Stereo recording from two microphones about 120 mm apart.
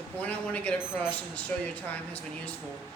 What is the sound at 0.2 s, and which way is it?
Speech, 10° left (ahead or behind).